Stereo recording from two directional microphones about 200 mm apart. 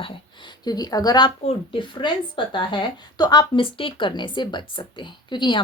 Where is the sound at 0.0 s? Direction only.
25° left (ahead or behind).